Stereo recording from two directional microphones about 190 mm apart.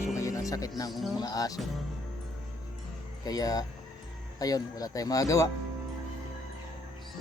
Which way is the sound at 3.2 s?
20° left (ahead or behind).